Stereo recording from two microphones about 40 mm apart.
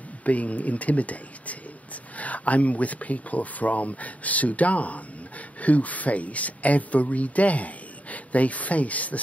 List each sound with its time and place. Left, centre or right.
0.2 s speech: left